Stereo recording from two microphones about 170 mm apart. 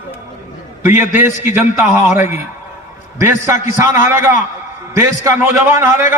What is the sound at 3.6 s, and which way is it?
A man's voice, 15° right (ahead or behind).